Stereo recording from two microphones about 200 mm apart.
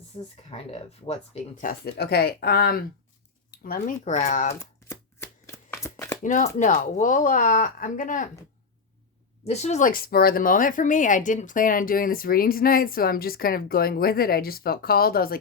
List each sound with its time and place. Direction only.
0.1 s speech: 25° left (ahead or behind)
1.8 s speech: 55° left (ahead or behind); by 4.5 s 35° left (ahead or behind)
4.6 s shuffling cards: 15° left (ahead or behind)
6.2 s speech: 40° left (ahead or behind)
9.5 s speech: 35° left (ahead or behind)